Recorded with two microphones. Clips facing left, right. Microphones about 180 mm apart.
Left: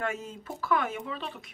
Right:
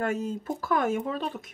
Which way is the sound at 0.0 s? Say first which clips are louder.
Right 6 dB; 40° right (ahead or behind).